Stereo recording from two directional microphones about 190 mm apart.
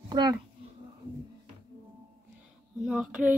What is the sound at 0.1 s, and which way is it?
Speech, 20° right (ahead or behind).